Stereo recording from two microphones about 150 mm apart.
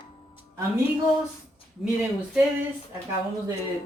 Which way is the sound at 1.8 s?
Centre (ahead or behind).